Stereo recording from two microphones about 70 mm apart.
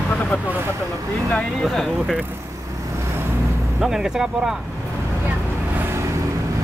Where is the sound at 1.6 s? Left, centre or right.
Centre.